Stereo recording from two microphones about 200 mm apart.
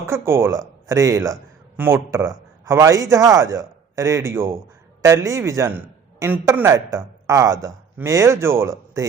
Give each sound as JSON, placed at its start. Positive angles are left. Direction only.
{"t": 0.0, "sound": "a man's voice", "side_deg": -15}